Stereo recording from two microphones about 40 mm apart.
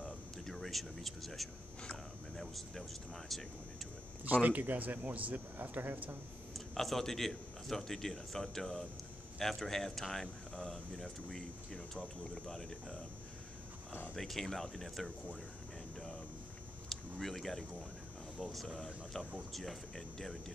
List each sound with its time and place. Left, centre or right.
0.0 s a sound: centre
2.4 s speech: centre
4.2 s speech: right
6.5 s speech: centre
14.1 s speech: centre
16.9 s a sound: centre
18.4 s speech: centre